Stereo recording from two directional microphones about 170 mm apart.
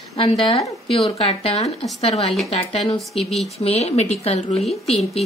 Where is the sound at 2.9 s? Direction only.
Centre (ahead or behind).